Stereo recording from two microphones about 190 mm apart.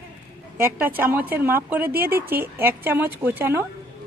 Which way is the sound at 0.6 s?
10° right (ahead or behind).